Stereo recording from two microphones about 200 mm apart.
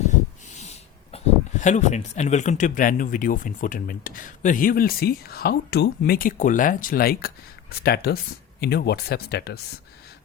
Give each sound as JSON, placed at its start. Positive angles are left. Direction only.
{"t": 1.1, "sound": "speech", "side_deg": 35}